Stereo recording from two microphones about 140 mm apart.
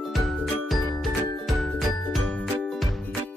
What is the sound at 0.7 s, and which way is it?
Music, centre (ahead or behind).